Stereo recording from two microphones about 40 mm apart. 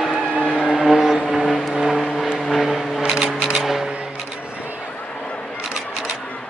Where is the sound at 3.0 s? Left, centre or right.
Centre.